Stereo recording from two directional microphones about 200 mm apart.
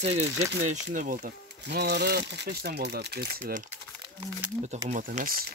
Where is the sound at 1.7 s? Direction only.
55° right (ahead or behind).